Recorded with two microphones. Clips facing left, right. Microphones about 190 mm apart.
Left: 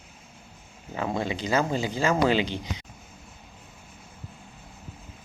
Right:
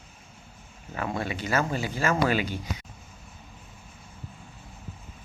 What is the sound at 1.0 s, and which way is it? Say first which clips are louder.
Speech: left 2 dB; 20° left (ahead or behind).